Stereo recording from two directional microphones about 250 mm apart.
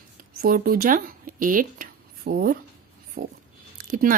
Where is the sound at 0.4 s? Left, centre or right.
Right.